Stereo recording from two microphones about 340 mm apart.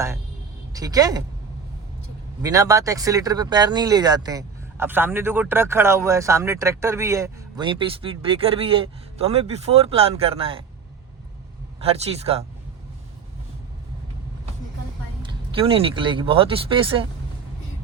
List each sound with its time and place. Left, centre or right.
0.7 s speech: centre
2.4 s speech: centre
11.8 s speech: centre
15.2 s speech: centre